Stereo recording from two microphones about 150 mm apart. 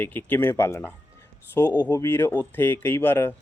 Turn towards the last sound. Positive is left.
turn(degrees=15)  # may be behind; listen again after turning